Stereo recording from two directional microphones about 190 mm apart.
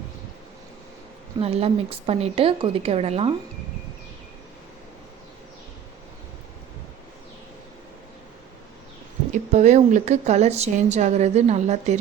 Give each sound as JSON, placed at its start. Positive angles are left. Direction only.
{"t": 1.4, "sound": "speech", "side_deg": -30}
{"t": 9.3, "sound": "speech", "side_deg": -40}